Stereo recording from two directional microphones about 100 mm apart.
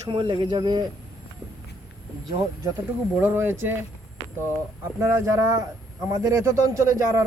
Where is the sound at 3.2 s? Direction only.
20° right (ahead or behind).